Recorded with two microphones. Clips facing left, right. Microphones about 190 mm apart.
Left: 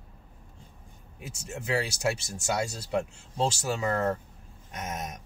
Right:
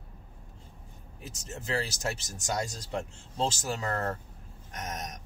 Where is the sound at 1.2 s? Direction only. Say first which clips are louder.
Left 3 dB; 10° left (ahead or behind).